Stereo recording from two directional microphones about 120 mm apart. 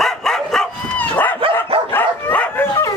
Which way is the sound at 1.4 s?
50° right (ahead or behind).